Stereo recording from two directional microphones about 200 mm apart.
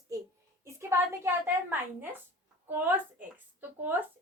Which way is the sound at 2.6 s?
10° right (ahead or behind).